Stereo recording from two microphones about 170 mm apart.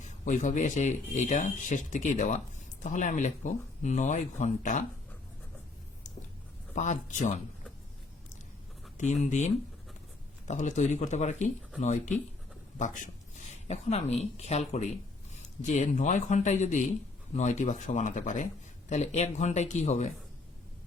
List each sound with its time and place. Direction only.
0.0 s speech: 45° left (ahead or behind)
6.7 s speech: 45° left (ahead or behind)
9.2 s speech: 45° left (ahead or behind)